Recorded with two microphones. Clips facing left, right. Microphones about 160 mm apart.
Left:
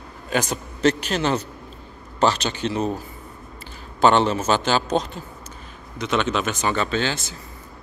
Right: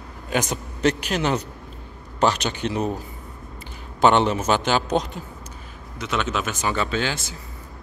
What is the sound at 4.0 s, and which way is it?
Speech, 15° right (ahead or behind).